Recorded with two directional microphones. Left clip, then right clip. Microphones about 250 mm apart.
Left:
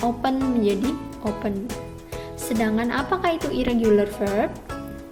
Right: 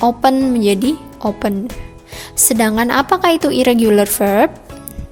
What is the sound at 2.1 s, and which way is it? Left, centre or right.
Speech, right.